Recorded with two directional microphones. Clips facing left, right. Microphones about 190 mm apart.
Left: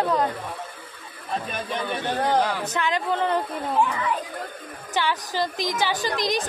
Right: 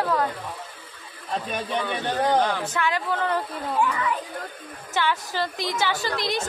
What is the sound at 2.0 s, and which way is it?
Speech, 5° left (ahead or behind).